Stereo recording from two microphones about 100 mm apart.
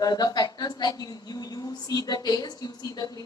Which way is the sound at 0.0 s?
40° left (ahead or behind).